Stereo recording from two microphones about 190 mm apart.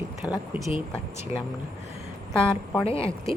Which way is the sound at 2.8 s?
30° left (ahead or behind).